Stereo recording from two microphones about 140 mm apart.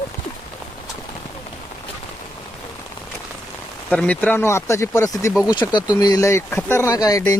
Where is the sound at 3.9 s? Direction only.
10° left (ahead or behind).